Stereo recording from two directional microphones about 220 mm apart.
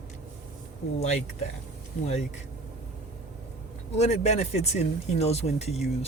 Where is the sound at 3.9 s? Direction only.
30° left (ahead or behind).